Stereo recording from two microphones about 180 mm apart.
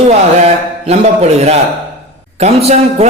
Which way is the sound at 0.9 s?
35° right (ahead or behind).